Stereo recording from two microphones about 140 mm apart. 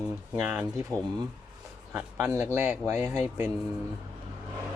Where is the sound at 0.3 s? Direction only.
10° right (ahead or behind).